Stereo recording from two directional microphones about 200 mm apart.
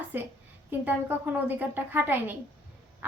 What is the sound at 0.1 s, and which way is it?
A woman's voice, 10° right (ahead or behind).